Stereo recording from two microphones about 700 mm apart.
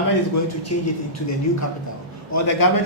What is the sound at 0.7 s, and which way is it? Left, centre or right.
Speech, left.